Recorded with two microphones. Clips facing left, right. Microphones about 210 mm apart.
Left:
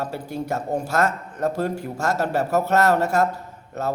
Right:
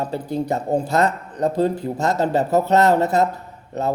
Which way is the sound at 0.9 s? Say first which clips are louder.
Right 3 dB; 20° right (ahead or behind).